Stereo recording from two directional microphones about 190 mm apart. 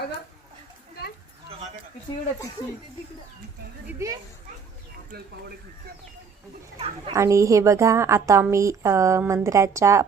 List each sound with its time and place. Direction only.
3.9 s a woman's voice: 15° right (ahead or behind)
5.1 s speech: 55° right (ahead or behind)
7.1 s a woman's voice: 15° right (ahead or behind)